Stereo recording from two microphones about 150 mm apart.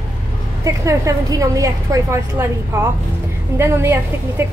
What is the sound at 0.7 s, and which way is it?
A woman's voice, 20° right (ahead or behind).